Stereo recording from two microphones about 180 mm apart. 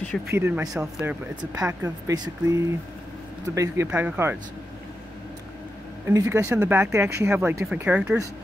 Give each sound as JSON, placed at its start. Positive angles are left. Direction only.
{"t": 0.3, "sound": "speech", "side_deg": -15}
{"t": 6.0, "sound": "speech", "side_deg": -15}